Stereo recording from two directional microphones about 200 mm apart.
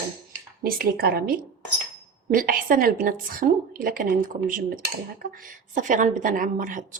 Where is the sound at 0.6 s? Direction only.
50° right (ahead or behind).